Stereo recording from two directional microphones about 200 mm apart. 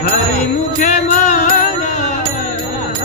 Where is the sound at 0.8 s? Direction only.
35° left (ahead or behind).